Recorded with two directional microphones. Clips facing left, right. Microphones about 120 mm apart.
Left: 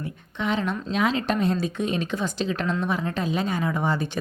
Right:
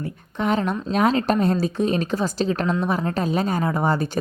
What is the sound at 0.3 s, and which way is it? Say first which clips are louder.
A woman's voice: right 4 dB; 45° right (ahead or behind).